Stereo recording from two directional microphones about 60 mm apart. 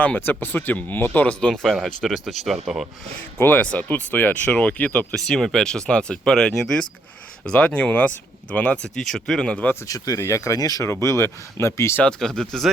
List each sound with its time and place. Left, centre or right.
0.2 s speech: left
1.4 s speech: centre
2.0 s speech: centre
3.3 s speech: left
3.6 s speech: left
5.1 s speech: centre
7.4 s speech: centre
9.0 s speech: centre
9.8 s speech: left
10.8 s speech: left
12.0 s speech: centre